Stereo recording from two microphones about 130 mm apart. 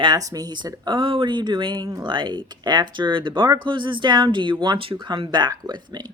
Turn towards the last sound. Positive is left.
turn(degrees=-35)  # may be behind; listen again after turning